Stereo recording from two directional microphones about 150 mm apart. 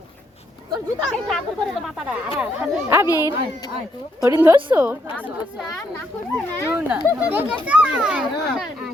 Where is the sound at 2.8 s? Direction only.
20° right (ahead or behind).